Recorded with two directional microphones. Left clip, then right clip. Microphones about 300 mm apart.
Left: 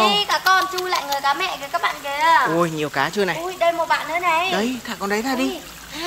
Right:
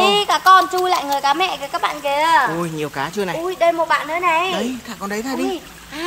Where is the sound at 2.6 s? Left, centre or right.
Centre.